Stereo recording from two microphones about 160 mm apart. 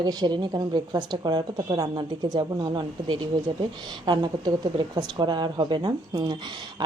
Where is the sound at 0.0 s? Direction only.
25° right (ahead or behind).